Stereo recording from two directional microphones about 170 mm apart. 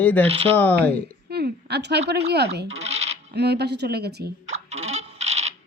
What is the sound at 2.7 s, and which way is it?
Coin, 40° right (ahead or behind).